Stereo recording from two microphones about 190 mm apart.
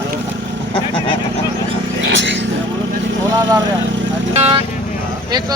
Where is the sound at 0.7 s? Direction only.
25° left (ahead or behind).